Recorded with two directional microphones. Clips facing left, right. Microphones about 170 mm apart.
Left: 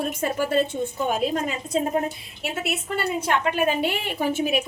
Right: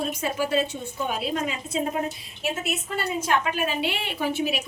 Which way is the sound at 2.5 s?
65° left (ahead or behind).